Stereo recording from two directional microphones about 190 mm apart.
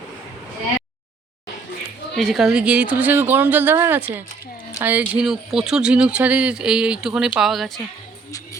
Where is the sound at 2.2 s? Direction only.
Centre (ahead or behind).